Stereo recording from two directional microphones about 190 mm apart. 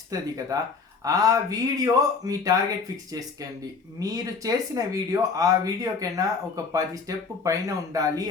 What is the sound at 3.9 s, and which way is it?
Speech, 20° right (ahead or behind).